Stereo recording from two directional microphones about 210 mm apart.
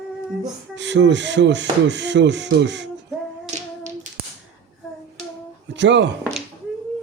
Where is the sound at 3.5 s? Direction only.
35° right (ahead or behind).